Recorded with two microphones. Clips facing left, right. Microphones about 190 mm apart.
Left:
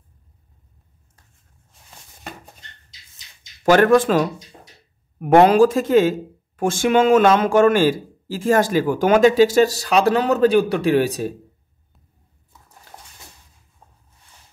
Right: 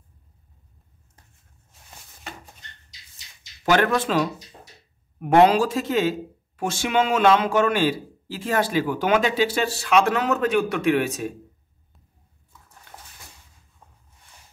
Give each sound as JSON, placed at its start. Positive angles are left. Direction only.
{"t": 3.7, "sound": "speech", "side_deg": 50}